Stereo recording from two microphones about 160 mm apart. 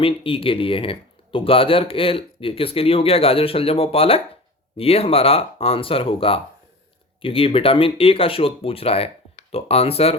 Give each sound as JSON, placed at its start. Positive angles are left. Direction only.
{"t": 0.0, "sound": "speech", "side_deg": 35}